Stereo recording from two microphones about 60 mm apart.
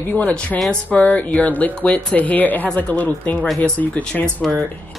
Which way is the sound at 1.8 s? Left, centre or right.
Centre.